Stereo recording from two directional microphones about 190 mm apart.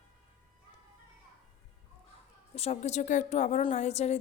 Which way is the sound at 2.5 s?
30° left (ahead or behind).